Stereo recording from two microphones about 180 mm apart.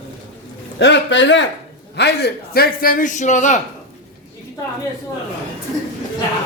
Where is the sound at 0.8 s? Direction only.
80° left.